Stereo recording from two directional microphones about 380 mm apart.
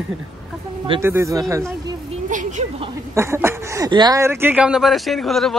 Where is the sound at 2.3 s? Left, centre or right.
Centre.